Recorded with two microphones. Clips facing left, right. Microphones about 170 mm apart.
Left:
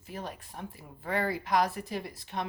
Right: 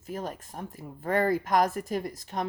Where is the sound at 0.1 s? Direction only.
45° right (ahead or behind).